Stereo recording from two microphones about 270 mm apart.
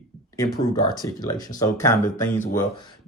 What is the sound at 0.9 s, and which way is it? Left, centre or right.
Speech, centre.